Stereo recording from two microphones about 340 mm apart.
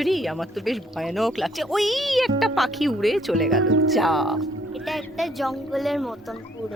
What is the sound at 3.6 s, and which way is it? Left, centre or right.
Speech, right.